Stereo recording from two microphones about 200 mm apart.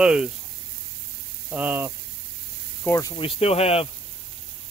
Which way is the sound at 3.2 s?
30° left (ahead or behind).